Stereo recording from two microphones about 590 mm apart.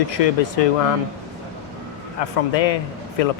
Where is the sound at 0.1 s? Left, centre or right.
Left.